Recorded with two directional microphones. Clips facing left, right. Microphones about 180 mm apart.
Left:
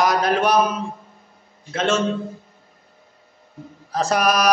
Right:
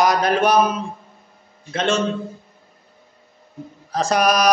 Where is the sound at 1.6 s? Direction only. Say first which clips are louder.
Even; 5° left (ahead or behind).